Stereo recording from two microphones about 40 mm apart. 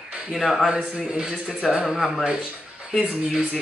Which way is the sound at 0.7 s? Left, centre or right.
Centre.